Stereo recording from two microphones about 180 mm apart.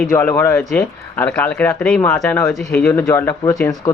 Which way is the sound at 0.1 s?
15° left (ahead or behind).